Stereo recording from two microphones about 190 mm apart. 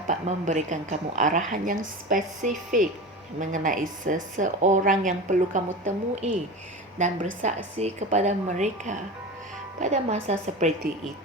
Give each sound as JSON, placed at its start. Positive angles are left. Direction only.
{"t": 0.1, "sound": "a woman's voice", "side_deg": -35}
{"t": 7.4, "sound": "a woman's voice", "side_deg": -35}